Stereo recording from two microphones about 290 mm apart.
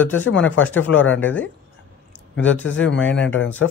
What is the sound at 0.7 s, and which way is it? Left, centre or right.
Speech, left.